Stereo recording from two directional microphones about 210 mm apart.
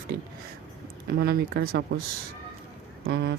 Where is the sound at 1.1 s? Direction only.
50° right (ahead or behind).